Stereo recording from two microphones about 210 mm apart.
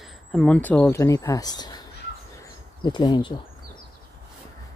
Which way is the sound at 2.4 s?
20° left (ahead or behind).